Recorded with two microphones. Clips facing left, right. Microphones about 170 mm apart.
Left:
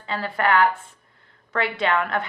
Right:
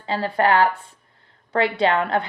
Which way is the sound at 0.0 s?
30° right (ahead or behind).